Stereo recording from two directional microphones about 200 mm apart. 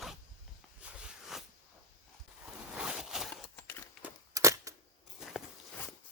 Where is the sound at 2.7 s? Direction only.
5° right (ahead or behind).